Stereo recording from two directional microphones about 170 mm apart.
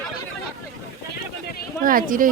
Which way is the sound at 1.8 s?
55° right (ahead or behind).